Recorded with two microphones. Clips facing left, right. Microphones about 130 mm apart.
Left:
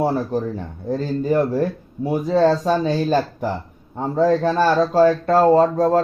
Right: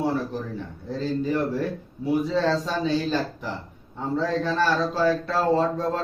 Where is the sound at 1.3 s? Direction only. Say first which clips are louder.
Left 6 dB; 45° left (ahead or behind).